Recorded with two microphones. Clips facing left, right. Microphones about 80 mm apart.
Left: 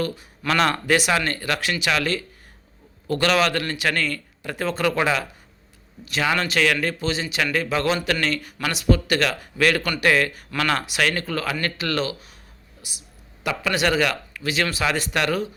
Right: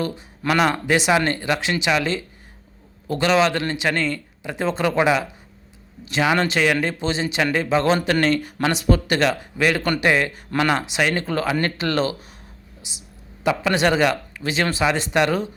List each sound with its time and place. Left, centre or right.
0.4 s a man's voice: centre; by 12.1 s right
12.8 s a man's voice: right